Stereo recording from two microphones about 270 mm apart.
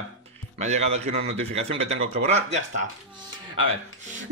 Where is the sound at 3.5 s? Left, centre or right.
Right.